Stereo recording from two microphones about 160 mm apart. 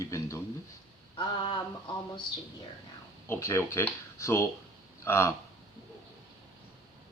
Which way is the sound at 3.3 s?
15° left (ahead or behind).